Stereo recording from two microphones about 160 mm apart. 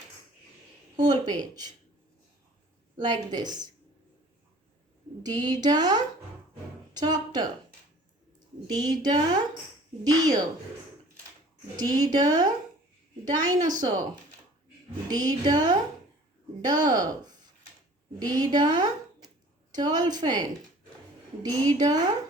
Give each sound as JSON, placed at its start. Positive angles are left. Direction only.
{"t": 0.9, "sound": "a woman's voice", "side_deg": -25}
{"t": 3.0, "sound": "a woman's voice", "side_deg": -25}
{"t": 5.2, "sound": "a woman's voice", "side_deg": -25}
{"t": 6.9, "sound": "a sound", "side_deg": -25}
{"t": 8.7, "sound": "a woman's voice", "side_deg": -25}
{"t": 11.8, "sound": "a woman's voice", "side_deg": -25}
{"t": 15.1, "sound": "a woman's voice", "side_deg": -25}